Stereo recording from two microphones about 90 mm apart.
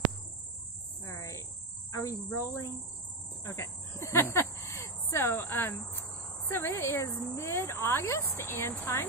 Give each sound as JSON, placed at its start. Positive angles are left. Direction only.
{"t": 1.0, "sound": "cricket", "side_deg": 35}
{"t": 2.2, "sound": "speech", "side_deg": 25}